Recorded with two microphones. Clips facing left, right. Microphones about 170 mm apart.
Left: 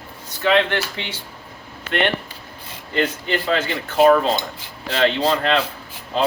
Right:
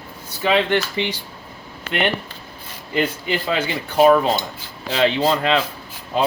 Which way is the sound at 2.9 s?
10° right (ahead or behind).